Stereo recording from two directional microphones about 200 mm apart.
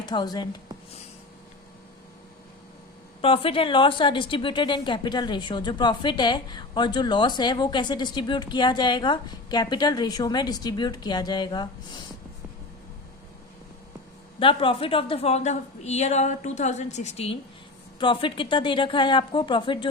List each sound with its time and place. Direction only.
0.0 s speech: 20° left (ahead or behind)
3.2 s a woman's voice: 30° left (ahead or behind)
14.3 s a woman's voice: 25° left (ahead or behind)